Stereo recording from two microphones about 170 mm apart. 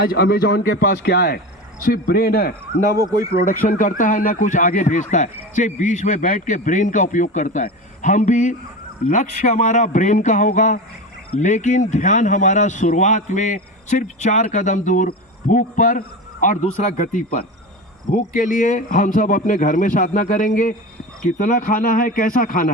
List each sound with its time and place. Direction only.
0.0 s a man's voice: 65° left (ahead or behind)
1.8 s a man's voice: 60° left (ahead or behind)
3.4 s speech: 55° left (ahead or behind)